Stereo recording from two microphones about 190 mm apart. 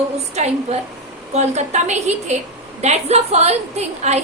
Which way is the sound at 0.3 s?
35° right (ahead or behind).